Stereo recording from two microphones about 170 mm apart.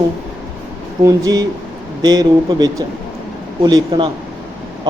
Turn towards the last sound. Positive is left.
turn(degrees=-25)  # may be behind; listen again after turning